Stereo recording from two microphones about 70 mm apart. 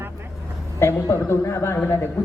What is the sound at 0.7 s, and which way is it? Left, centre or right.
A man's voice, left.